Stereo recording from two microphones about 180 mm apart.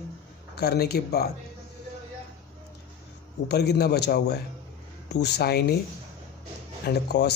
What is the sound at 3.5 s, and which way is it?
A man's voice, 65° left (ahead or behind).